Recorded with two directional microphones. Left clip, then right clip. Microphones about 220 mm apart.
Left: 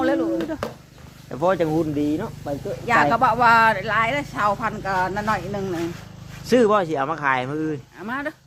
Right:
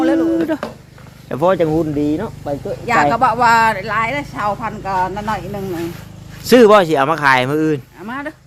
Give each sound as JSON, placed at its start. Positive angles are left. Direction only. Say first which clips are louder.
{"t": 0.0, "sound": "a sound", "louder": "right 6 dB", "side_deg": 0}
{"t": 0.6, "sound": "a sound", "louder": "right 3 dB", "side_deg": 50}
{"t": 1.4, "sound": "speech", "louder": "right 6 dB", "side_deg": -30}
{"t": 2.8, "sound": "speech", "louder": "right 4 dB", "side_deg": -5}
{"t": 6.4, "sound": "speech", "louder": "right 9 dB", "side_deg": -45}
{"t": 8.0, "sound": "speech", "louder": "right 2 dB", "side_deg": 10}